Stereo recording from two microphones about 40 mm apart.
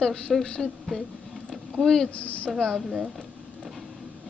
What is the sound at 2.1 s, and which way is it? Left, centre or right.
Speech, left.